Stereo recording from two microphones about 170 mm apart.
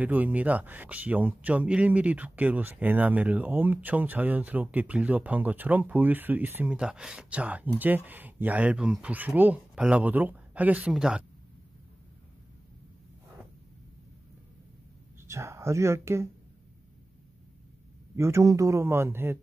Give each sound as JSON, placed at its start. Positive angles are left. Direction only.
{"t": 0.0, "sound": "speech", "side_deg": -10}
{"t": 15.2, "sound": "speech", "side_deg": -15}
{"t": 18.1, "sound": "speech", "side_deg": -15}